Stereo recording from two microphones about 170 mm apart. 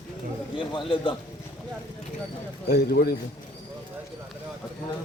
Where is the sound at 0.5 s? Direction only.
30° left (ahead or behind).